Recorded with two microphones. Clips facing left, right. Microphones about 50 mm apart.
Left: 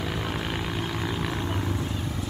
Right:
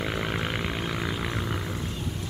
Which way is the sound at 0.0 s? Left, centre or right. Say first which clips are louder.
Right 1 dB; centre.